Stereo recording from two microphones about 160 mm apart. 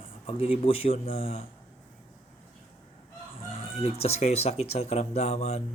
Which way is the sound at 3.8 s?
40° left (ahead or behind).